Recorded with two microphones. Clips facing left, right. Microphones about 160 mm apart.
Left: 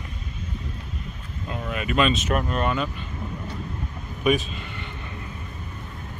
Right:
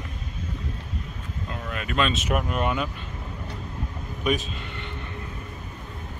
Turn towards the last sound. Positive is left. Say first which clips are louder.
# even
turn(degrees=5)  # may be behind; listen again after turning